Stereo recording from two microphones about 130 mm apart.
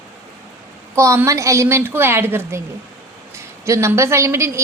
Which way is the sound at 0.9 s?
20° right (ahead or behind).